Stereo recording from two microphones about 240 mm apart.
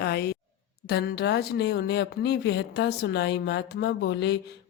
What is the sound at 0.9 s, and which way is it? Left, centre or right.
Speech, left.